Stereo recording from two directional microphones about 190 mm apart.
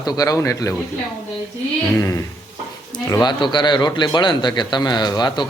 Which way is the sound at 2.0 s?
15° left (ahead or behind).